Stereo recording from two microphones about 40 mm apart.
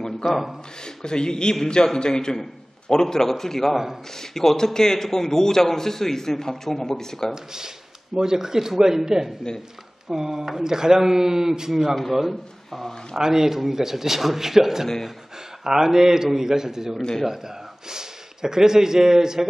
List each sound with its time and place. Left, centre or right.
0.2 s a man's voice: centre
0.8 s a man's voice: centre
3.7 s a man's voice: centre
4.1 s a man's voice: centre
7.5 s a man's voice: centre
13.2 s a man's voice: centre